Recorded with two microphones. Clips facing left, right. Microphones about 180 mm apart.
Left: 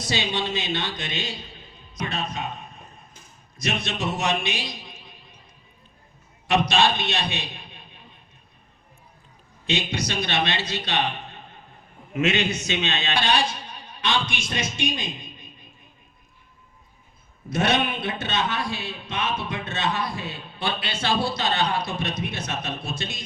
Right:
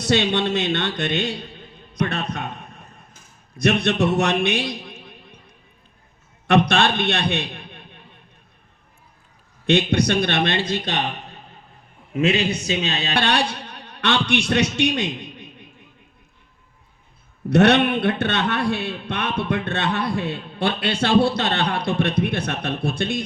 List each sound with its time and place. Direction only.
0.0 s a man's voice: 60° right (ahead or behind)
6.5 s a man's voice: 60° right (ahead or behind)
9.6 s a man's voice: 60° right (ahead or behind)
12.1 s a man's voice: 30° right (ahead or behind)
13.1 s a man's voice: 65° right (ahead or behind)
17.5 s a man's voice: 65° right (ahead or behind)